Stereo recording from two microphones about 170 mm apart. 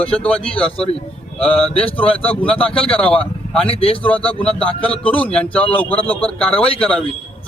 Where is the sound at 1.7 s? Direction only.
35° left (ahead or behind).